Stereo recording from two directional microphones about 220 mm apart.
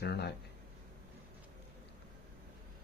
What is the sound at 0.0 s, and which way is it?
Speech, 50° left (ahead or behind).